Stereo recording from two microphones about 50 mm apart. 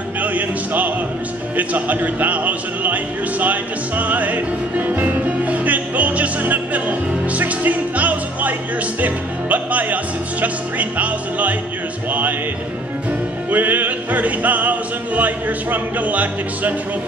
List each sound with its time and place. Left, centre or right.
0.2 s music: right
1.6 s a sound: right
9.0 s music: right
13.5 s music: right